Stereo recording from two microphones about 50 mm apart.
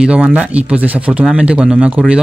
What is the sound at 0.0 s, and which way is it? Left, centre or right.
Speech, centre.